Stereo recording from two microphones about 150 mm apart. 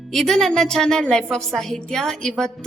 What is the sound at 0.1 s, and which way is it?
A woman's voice, centre (ahead or behind).